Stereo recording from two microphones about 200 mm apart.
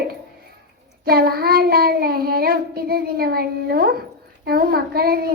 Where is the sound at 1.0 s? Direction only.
50° right (ahead or behind).